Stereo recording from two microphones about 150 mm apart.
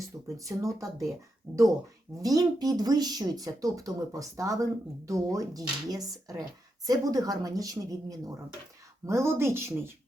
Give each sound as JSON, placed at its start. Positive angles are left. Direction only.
{"t": 0.3, "sound": "speech", "side_deg": -20}
{"t": 1.5, "sound": "speech", "side_deg": 5}
{"t": 2.2, "sound": "speech", "side_deg": -25}